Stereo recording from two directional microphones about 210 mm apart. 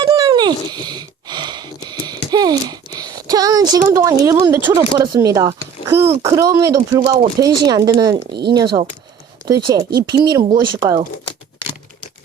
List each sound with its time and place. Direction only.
0.0 s a sound: 20° right (ahead or behind)
4.9 s speech: 20° right (ahead or behind)
8.3 s speech: 50° right (ahead or behind)
8.5 s speech: 20° right (ahead or behind)